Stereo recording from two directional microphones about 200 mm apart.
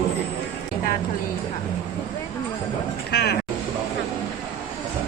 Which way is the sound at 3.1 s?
55° left (ahead or behind).